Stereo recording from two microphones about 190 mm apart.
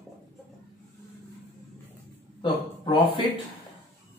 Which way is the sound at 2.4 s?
25° left (ahead or behind).